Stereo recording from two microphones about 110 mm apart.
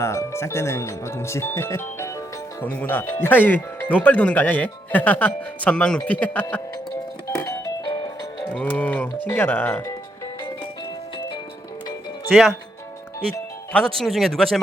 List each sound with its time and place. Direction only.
0.0 s speech: 25° left (ahead or behind)
7.3 s music: 25° left (ahead or behind)
8.4 s speech: 15° left (ahead or behind)
12.3 s speech: centre (ahead or behind)
13.7 s speech: 5° left (ahead or behind)